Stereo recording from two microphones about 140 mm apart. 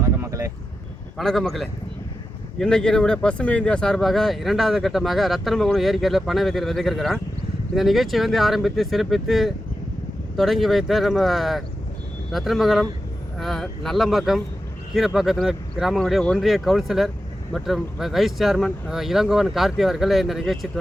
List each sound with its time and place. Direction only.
0.0 s vehicle: 20° right (ahead or behind)
1.2 s speech: 5° left (ahead or behind)